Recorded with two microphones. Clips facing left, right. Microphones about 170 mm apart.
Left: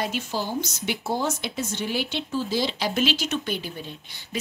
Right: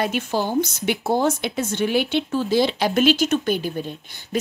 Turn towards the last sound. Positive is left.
turn(degrees=-45)  # may be behind; listen again after turning